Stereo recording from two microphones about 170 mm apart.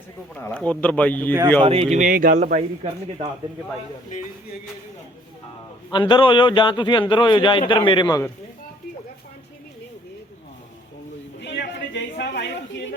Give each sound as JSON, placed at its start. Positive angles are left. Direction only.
{"t": 0.3, "sound": "speech", "side_deg": 10}
{"t": 1.6, "sound": "speech", "side_deg": -35}
{"t": 5.9, "sound": "a man's voice", "side_deg": 30}
{"t": 11.3, "sound": "a sound", "side_deg": 90}